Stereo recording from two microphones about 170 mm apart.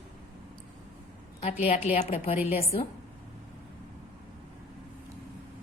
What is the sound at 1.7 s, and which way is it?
Speech, 40° left (ahead or behind).